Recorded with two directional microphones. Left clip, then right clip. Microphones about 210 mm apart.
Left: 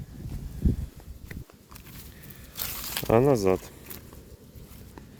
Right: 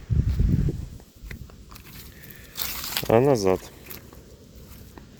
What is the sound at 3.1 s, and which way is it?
Speech, 5° left (ahead or behind).